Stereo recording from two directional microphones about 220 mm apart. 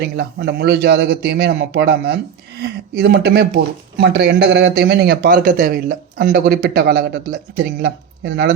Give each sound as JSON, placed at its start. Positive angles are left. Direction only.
{"t": 0.0, "sound": "a man's voice", "side_deg": -45}